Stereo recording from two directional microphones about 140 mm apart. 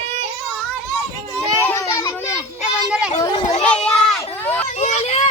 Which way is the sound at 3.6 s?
5° left (ahead or behind).